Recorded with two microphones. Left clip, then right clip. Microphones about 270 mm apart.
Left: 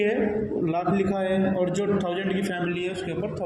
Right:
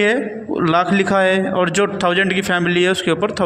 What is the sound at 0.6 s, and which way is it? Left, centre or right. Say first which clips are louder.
A man's voice: right 12 dB; right.